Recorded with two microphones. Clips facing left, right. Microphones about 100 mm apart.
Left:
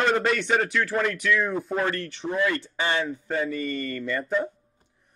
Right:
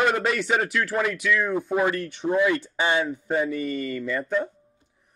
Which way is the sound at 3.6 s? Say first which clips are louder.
Right 2 dB; 5° right (ahead or behind).